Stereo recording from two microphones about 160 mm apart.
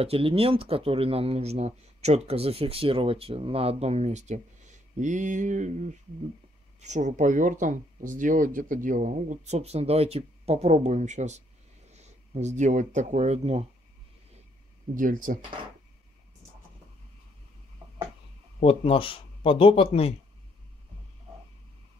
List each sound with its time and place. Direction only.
0.0 s speech: 35° right (ahead or behind)
15.0 s speech: 55° right (ahead or behind)
17.8 s tick-tock: 25° right (ahead or behind)
18.6 s speech: 35° left (ahead or behind)